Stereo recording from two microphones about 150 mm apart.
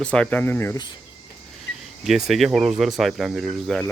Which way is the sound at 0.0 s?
5° left (ahead or behind).